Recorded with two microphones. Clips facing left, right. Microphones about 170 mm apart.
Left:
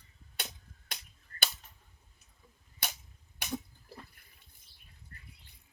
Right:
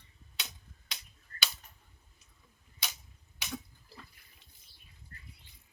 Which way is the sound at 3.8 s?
50° left (ahead or behind).